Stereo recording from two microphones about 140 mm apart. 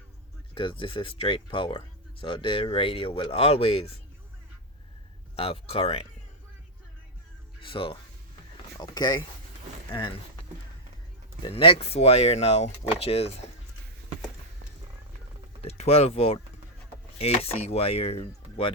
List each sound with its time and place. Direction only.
0.5 s speech: 40° left (ahead or behind)
5.4 s speech: 45° left (ahead or behind)
7.6 s speech: 40° left (ahead or behind)
11.4 s speech: 40° left (ahead or behind)
15.6 s speech: 45° left (ahead or behind)